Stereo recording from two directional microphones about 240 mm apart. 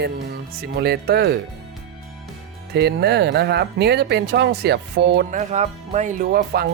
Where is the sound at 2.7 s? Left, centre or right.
Right.